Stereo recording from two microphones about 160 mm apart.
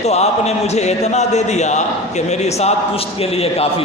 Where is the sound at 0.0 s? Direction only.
40° left (ahead or behind).